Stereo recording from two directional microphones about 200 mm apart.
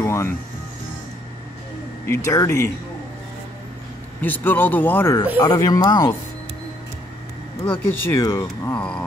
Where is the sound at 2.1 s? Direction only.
15° left (ahead or behind).